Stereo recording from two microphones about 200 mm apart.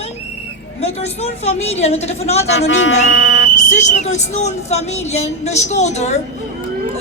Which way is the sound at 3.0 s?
75° left (ahead or behind).